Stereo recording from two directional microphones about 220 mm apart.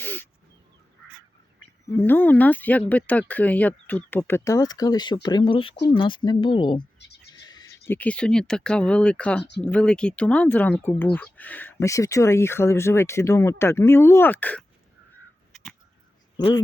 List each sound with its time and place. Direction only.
0.0 s a sound: 10° left (ahead or behind)
1.9 s speech: 10° left (ahead or behind)
16.4 s speech: 20° left (ahead or behind)